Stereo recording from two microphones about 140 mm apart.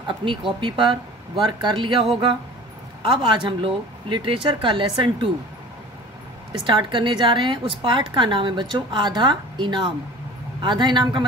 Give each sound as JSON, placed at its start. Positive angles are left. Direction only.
{"t": 0.0, "sound": "a woman's voice", "side_deg": -35}
{"t": 6.6, "sound": "a woman's voice", "side_deg": -35}